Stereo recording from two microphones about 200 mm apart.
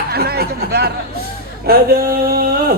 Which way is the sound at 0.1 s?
50° right (ahead or behind).